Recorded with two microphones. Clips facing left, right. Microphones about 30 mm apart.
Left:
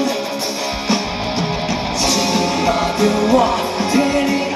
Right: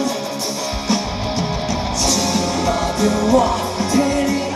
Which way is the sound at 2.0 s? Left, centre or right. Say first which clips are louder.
Left 2 dB; left.